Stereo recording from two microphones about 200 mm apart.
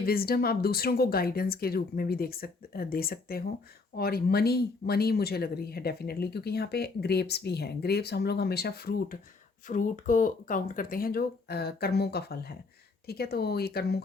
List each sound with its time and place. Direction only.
0.0 s speech: 50° left (ahead or behind)